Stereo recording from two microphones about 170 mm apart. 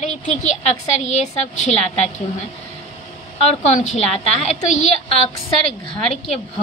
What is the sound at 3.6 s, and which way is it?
A child's voice, 45° left (ahead or behind).